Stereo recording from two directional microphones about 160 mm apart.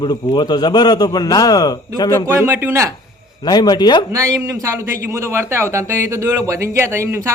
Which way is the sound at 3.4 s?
25° left (ahead or behind).